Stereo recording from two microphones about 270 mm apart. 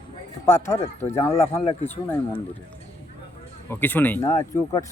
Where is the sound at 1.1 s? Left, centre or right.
Left.